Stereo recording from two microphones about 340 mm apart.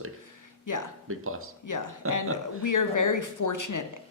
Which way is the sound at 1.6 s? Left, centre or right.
Left.